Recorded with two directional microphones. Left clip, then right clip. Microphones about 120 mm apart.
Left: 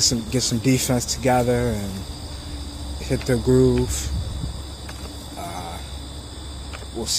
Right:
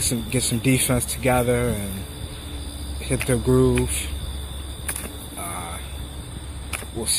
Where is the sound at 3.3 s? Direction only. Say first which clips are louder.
Left 2 dB; 5° left (ahead or behind).